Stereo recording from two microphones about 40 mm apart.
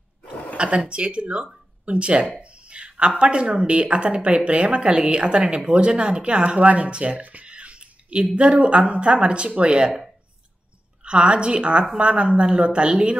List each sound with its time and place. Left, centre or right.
0.6 s speech: right
2.4 s a sound: right
3.2 s speech: right
7.4 s a sound: right
8.4 s speech: right
11.1 s speech: right